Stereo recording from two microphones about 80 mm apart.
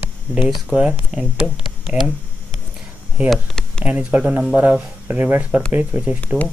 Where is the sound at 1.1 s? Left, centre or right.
Centre.